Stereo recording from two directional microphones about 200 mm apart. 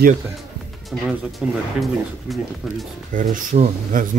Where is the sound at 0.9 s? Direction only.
Centre (ahead or behind).